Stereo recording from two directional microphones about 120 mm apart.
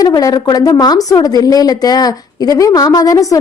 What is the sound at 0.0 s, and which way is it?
A woman's voice, 30° left (ahead or behind).